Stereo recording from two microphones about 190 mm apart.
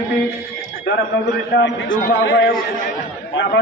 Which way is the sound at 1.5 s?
70° left (ahead or behind).